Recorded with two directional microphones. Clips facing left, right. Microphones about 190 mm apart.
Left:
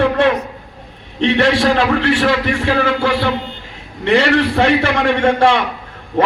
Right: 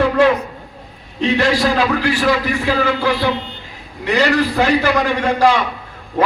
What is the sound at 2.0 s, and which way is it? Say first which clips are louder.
Speech: left 2 dB; 60° left (ahead or behind).